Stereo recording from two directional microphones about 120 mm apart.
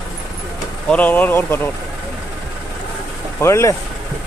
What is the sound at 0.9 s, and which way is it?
Speech, 15° left (ahead or behind).